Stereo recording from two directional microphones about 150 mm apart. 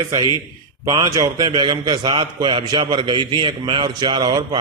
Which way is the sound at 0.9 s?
25° right (ahead or behind).